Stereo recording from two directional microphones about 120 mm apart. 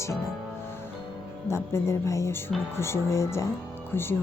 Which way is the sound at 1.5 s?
20° left (ahead or behind).